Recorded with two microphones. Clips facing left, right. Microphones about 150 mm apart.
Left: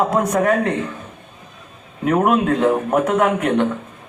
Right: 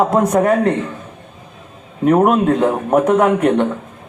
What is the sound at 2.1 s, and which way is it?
A man's voice, 30° right (ahead or behind).